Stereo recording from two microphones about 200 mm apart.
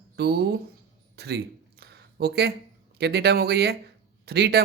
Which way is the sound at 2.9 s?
55° right (ahead or behind).